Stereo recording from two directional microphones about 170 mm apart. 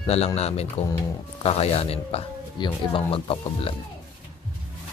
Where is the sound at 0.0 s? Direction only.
40° left (ahead or behind).